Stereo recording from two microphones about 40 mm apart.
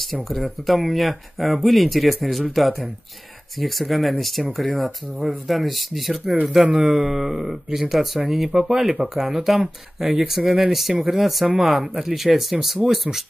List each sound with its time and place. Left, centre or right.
0.0 s speech: centre